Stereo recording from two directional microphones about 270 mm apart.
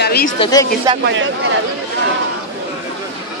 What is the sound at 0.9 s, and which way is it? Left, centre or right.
Speech, centre.